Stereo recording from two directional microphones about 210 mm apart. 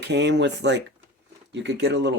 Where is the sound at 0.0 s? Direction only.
55° right (ahead or behind).